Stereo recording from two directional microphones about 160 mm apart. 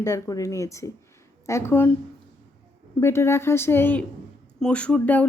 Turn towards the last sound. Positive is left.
turn(degrees=10)  # may be behind; listen again after turning